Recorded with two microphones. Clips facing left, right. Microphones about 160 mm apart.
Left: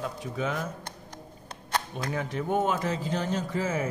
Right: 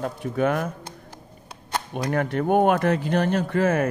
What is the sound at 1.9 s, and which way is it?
Speech, 60° right (ahead or behind).